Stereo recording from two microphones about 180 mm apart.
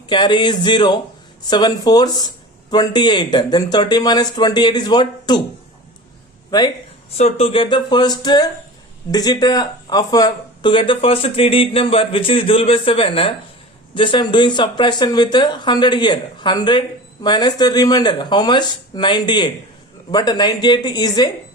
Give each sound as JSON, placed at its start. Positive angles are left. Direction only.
{"t": 0.1, "sound": "speech", "side_deg": 25}
{"t": 6.5, "sound": "speech", "side_deg": 20}
{"t": 7.1, "sound": "speech", "side_deg": 35}